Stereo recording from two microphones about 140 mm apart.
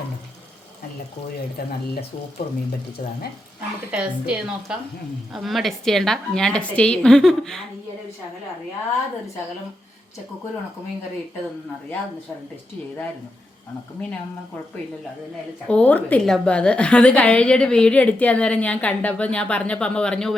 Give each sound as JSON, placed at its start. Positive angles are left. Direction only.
{"t": 1.6, "sound": "speech", "side_deg": 90}
{"t": 2.4, "sound": "speech", "side_deg": 55}
{"t": 3.9, "sound": "a woman's voice", "side_deg": -5}
{"t": 15.6, "sound": "a woman's voice", "side_deg": 10}